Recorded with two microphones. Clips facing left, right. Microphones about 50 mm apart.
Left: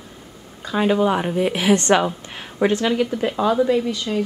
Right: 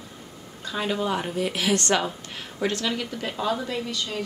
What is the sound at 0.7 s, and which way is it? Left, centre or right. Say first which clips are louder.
A woman's voice: left 8 dB; left.